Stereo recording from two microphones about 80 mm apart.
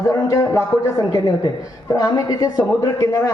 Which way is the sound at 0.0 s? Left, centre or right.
Left.